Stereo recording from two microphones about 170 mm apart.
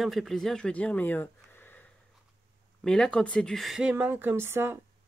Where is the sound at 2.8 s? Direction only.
5° left (ahead or behind); by 4.8 s 15° right (ahead or behind).